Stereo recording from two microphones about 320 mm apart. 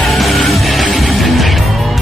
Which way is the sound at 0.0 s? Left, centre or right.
Centre.